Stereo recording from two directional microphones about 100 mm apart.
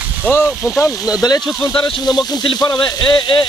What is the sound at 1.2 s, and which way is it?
Speech, 40° left (ahead or behind).